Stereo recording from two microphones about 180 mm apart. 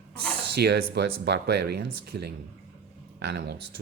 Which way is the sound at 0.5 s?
65° right (ahead or behind).